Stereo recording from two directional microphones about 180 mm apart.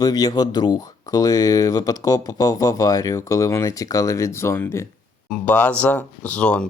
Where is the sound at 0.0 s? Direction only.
20° left (ahead or behind).